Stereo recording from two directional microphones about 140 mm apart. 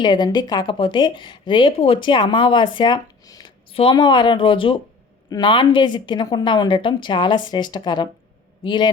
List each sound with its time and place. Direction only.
0.0 s speech: 30° left (ahead or behind)
3.7 s speech: 40° left (ahead or behind)